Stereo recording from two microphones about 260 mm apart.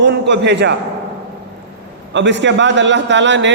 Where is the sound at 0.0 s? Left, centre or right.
Right.